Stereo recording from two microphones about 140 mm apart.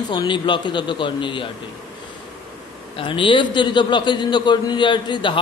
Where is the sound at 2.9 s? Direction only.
35° left (ahead or behind).